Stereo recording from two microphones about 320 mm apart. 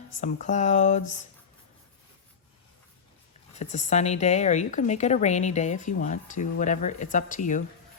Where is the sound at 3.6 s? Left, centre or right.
Left.